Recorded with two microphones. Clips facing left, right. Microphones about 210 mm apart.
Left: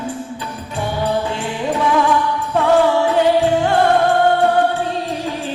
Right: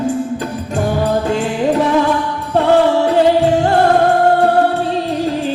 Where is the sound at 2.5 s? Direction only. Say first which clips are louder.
Right 3 dB; 35° right (ahead or behind).